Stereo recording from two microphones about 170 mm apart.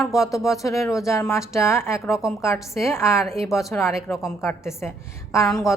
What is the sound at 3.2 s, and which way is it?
Speech, centre (ahead or behind).